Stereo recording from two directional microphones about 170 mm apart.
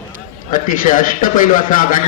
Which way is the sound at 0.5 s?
50° left (ahead or behind).